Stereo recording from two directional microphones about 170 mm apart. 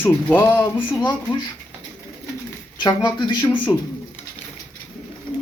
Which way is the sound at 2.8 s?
25° left (ahead or behind).